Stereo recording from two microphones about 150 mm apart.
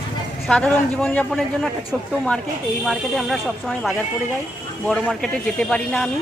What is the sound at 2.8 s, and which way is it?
Speech, centre (ahead or behind).